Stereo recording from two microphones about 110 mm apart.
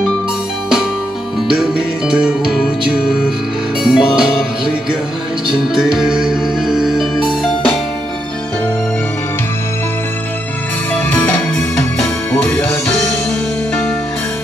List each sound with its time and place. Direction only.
2.0 s music: 5° right (ahead or behind)
11.1 s music: 15° left (ahead or behind)
12.3 s music: 20° left (ahead or behind)